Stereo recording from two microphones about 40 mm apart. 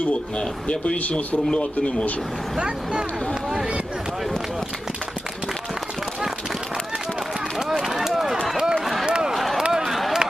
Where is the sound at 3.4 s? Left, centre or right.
Centre.